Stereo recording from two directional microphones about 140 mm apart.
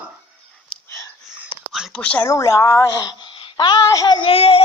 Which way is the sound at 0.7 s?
5° left (ahead or behind).